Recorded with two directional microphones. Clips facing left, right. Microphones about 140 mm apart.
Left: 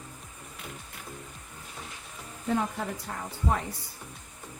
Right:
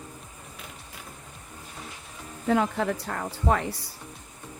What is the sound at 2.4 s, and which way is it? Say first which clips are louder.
Speech: right 5 dB; 85° right.